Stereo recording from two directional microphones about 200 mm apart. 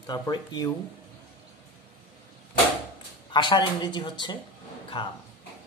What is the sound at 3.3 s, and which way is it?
Speech, 20° left (ahead or behind).